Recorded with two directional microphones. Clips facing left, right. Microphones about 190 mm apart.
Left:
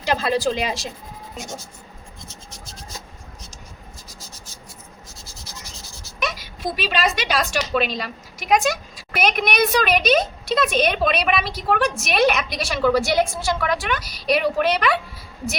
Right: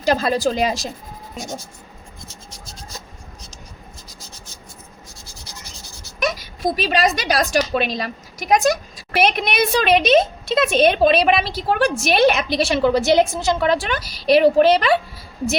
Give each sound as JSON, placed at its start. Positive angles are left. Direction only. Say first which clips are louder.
{"t": 0.0, "sound": "a woman's voice", "louder": "right 3 dB", "side_deg": -40}
{"t": 6.1, "sound": "a woman's voice", "louder": "right 5 dB", "side_deg": -40}